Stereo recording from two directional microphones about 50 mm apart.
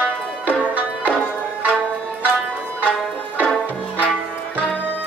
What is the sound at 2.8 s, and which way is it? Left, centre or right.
Music, left.